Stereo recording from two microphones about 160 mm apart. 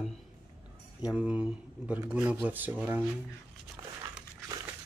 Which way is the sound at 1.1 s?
10° right (ahead or behind).